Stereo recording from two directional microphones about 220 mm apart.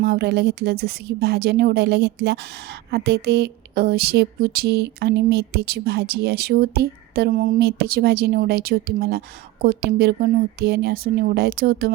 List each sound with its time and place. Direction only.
0.0 s speech: 45° right (ahead or behind)